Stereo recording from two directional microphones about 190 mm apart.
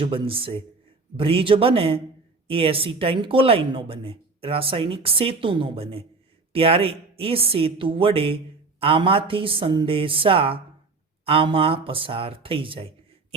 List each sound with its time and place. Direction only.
0.0 s speech: 30° right (ahead or behind)